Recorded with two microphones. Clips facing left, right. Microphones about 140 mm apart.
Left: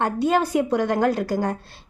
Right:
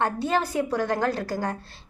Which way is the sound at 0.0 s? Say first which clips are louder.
Left 4 dB; 15° left (ahead or behind).